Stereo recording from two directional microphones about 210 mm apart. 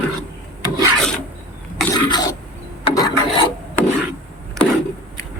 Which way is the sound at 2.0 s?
20° left (ahead or behind).